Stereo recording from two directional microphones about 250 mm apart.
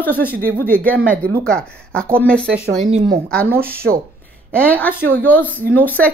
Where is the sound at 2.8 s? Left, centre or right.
Right.